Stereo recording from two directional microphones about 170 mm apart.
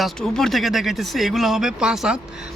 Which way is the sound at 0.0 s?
Centre (ahead or behind).